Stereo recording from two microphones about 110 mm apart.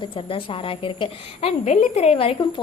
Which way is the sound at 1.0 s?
65° left (ahead or behind).